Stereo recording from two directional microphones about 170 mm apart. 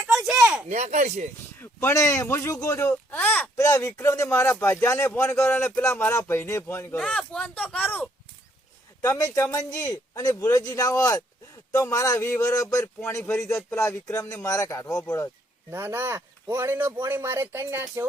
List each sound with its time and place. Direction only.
0.7 s speech: 45° right (ahead or behind)
1.8 s speech: 15° left (ahead or behind)
3.5 s speech: 20° left (ahead or behind)
9.0 s speech: 20° left (ahead or behind)
15.7 s speech: 15° right (ahead or behind)